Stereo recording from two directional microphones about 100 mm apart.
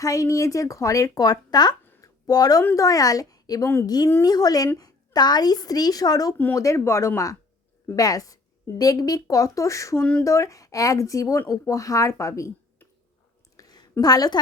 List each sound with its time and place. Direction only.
0.0 s speech: 35° left (ahead or behind)
2.0 s a sound: 40° left (ahead or behind)
2.7 s speech: 35° left (ahead or behind)
6.3 s speech: 20° left (ahead or behind)
10.0 s speech: 10° left (ahead or behind)
10.2 s speech: 30° left (ahead or behind)
13.6 s a sound: 40° left (ahead or behind)
14.0 s speech: 40° left (ahead or behind)